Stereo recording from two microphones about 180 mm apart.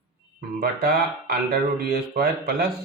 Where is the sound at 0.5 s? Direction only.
60° right (ahead or behind).